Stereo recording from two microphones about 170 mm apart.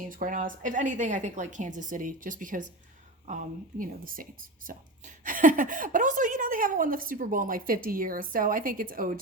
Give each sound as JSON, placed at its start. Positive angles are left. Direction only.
{"t": 0.1, "sound": "speech", "side_deg": -55}